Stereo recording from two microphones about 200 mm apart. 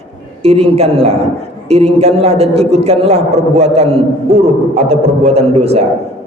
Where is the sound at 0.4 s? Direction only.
30° right (ahead or behind).